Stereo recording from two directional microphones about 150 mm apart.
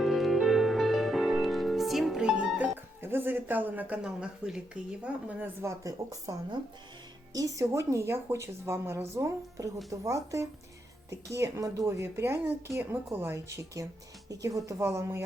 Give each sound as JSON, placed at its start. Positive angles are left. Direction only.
{"t": 0.0, "sound": "music", "side_deg": 0}
{"t": 5.6, "sound": "a woman's voice", "side_deg": -20}